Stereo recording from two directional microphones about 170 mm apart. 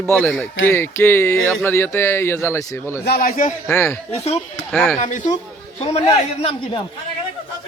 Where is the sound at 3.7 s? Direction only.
10° left (ahead or behind).